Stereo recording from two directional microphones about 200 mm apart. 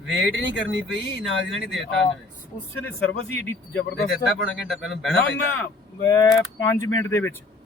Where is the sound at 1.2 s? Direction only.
Centre (ahead or behind).